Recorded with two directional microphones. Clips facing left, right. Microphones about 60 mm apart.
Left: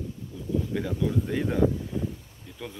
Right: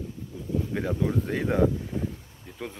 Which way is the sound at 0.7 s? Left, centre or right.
Right.